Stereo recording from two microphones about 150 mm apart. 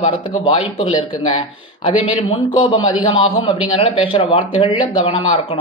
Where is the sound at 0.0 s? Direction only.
45° left (ahead or behind).